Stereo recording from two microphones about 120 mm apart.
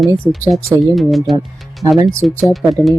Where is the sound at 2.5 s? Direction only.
Centre (ahead or behind).